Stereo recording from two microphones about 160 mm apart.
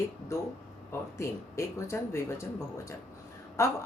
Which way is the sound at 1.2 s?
15° left (ahead or behind).